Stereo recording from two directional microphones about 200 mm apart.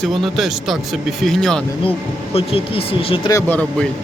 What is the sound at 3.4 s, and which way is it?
Speech, 10° left (ahead or behind).